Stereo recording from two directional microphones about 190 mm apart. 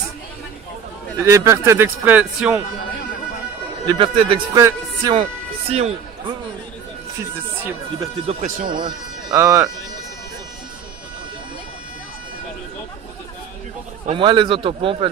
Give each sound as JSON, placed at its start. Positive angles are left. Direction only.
{"t": 1.2, "sound": "speech", "side_deg": -15}
{"t": 3.8, "sound": "a man's voice", "side_deg": -25}
{"t": 5.6, "sound": "speech", "side_deg": -30}
{"t": 8.3, "sound": "speech", "side_deg": -40}
{"t": 8.6, "sound": "a man's voice", "side_deg": -25}
{"t": 14.1, "sound": "a man's voice", "side_deg": -25}